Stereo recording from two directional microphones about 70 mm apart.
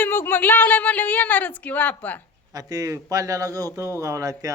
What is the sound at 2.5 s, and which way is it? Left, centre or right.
A man's voice, right.